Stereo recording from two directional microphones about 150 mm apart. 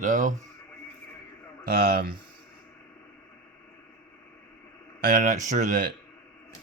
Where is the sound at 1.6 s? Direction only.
80° right.